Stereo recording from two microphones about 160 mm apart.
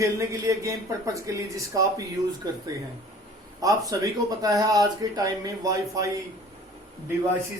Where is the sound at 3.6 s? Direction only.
20° right (ahead or behind).